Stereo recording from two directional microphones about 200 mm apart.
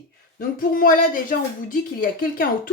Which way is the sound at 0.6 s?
45° left (ahead or behind).